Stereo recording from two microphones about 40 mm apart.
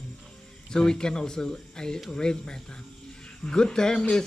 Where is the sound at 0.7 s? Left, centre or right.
Centre.